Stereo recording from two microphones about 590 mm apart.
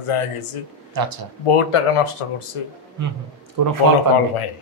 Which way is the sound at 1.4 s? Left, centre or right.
Left.